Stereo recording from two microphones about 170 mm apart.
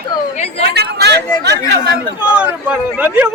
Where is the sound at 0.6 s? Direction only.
75° right (ahead or behind).